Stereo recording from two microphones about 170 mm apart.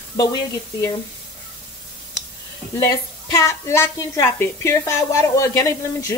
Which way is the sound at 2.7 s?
20° left (ahead or behind).